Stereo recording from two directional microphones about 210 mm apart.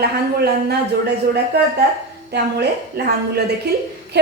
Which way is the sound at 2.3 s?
50° right (ahead or behind).